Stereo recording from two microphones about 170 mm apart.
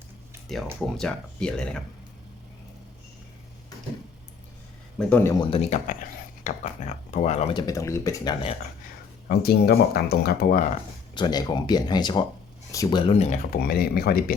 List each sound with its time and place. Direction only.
0.8 s speech: 5° left (ahead or behind)
4.9 s a man's voice: 10° left (ahead or behind)
5.3 s speech: 25° left (ahead or behind)
5.5 s speech: 40° left (ahead or behind)
7.5 s speech: 20° left (ahead or behind)
9.3 s speech: 70° left (ahead or behind)
11.1 s speech: 25° left (ahead or behind)
13.1 s speech: 40° left (ahead or behind)
13.5 s speech: 60° left (ahead or behind)